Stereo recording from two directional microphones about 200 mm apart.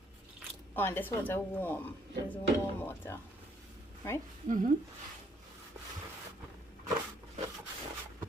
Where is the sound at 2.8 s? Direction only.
10° left (ahead or behind).